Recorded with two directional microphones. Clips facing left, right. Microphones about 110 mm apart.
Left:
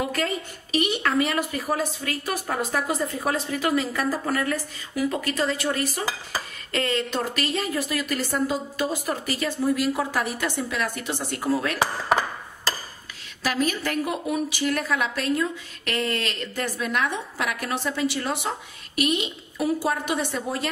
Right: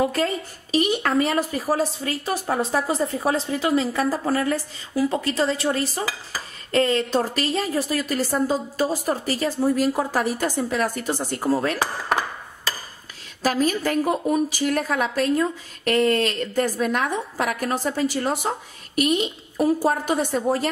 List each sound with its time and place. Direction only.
0.1 s speech: 35° right (ahead or behind)
13.4 s speech: 40° right (ahead or behind)